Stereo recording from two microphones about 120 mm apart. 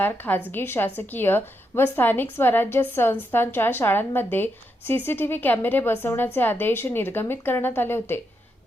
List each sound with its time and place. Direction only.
0.0 s a woman's voice: 15° left (ahead or behind)